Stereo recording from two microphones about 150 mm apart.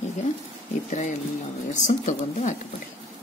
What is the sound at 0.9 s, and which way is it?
A woman's voice, 50° left (ahead or behind).